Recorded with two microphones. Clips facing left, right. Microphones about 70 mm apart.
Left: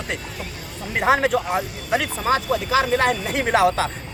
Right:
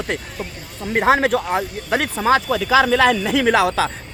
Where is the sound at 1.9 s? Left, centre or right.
Right.